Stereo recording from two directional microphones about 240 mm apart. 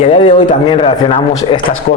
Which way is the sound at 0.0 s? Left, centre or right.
Left.